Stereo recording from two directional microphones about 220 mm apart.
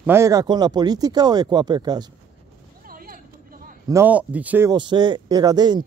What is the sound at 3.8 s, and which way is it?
Speech, 10° right (ahead or behind).